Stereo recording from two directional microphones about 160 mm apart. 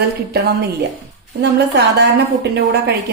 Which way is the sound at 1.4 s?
90° right.